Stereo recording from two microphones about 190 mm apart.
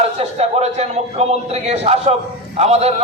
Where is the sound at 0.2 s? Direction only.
35° right (ahead or behind).